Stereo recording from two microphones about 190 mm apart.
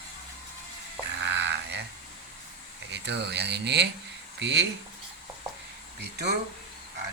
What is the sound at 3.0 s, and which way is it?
Speech, 60° right (ahead or behind).